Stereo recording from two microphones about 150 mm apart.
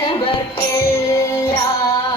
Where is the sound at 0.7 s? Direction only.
20° left (ahead or behind).